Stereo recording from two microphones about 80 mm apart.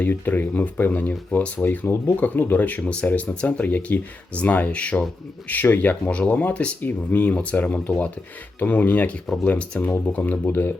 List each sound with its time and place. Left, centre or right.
0.0 s speech: left
9.2 s speech: centre
9.5 s speech: centre